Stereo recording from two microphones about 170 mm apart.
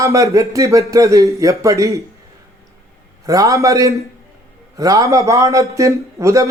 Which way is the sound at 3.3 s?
20° right (ahead or behind).